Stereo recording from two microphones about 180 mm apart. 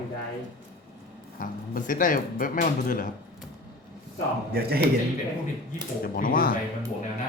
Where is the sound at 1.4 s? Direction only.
50° left (ahead or behind).